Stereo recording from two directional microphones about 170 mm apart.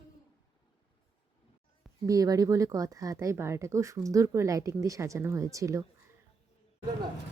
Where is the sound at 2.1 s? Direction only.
20° right (ahead or behind).